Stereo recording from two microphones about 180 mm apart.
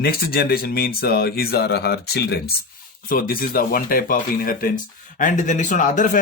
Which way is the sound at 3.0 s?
55° left (ahead or behind).